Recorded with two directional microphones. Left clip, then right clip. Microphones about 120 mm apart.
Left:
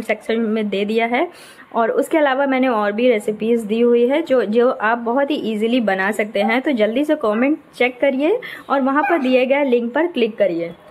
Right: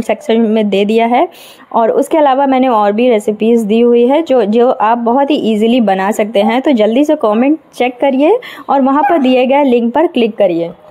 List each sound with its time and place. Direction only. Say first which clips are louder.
0.1 s a woman's voice: right 8 dB; 40° right (ahead or behind)